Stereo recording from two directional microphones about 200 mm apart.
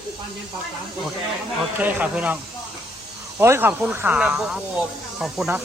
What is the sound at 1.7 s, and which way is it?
Speech, 10° right (ahead or behind).